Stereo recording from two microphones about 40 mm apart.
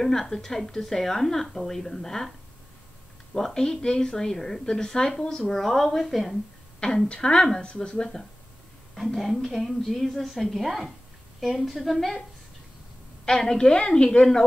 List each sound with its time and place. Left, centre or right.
0.0 s a woman's voice: centre
3.3 s a woman's voice: centre
5.4 s a woman's voice: centre
7.1 s a woman's voice: left
8.9 s a woman's voice: centre
13.2 s a woman's voice: centre